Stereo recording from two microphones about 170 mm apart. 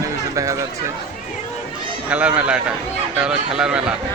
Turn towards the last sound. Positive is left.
turn(degrees=-5)  # may be behind; listen again after turning